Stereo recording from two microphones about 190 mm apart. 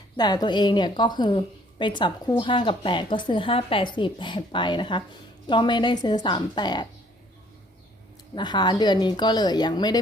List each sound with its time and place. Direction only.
0.2 s speech: 20° left (ahead or behind)
8.4 s speech: 25° left (ahead or behind)